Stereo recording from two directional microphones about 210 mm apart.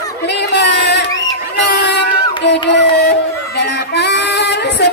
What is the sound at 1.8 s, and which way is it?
Crowd, 55° left (ahead or behind).